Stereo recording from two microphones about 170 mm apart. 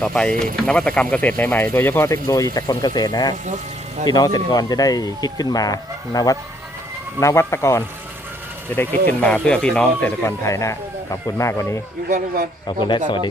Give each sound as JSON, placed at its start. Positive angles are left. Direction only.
{"t": 0.0, "sound": "speech", "side_deg": 5}
{"t": 12.0, "sound": "speech", "side_deg": -55}
{"t": 12.6, "sound": "speech", "side_deg": 30}